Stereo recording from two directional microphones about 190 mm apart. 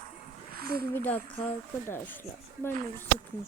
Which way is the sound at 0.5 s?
55° right (ahead or behind).